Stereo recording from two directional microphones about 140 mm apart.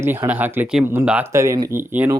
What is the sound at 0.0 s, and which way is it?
Speech, 15° right (ahead or behind).